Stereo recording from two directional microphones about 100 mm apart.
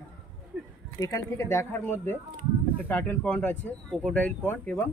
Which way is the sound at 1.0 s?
30° left (ahead or behind).